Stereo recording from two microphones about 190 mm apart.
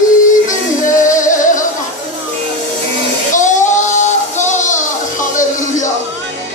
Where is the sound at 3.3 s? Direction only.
40° left (ahead or behind).